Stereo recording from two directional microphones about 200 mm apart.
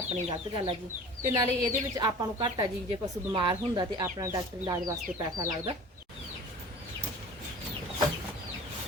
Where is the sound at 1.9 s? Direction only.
20° right (ahead or behind).